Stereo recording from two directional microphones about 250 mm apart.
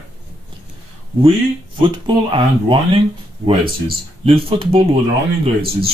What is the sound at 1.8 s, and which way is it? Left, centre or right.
Speech, centre.